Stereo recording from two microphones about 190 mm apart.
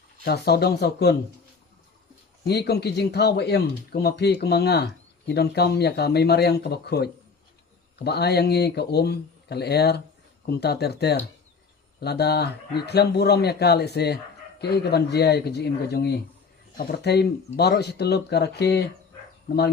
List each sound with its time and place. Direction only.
0.3 s speech: 60° left (ahead or behind)
2.4 s speech: 60° left (ahead or behind)